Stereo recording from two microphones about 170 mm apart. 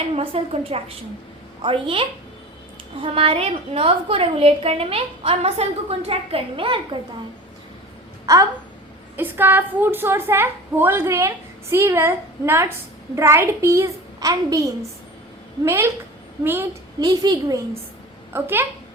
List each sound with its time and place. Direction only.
0.2 s a woman's voice: 35° right (ahead or behind)
9.1 s a woman's voice: 10° right (ahead or behind)
17.0 s a woman's voice: 25° right (ahead or behind)